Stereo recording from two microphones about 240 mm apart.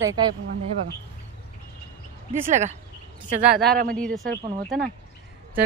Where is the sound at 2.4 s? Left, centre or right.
Right.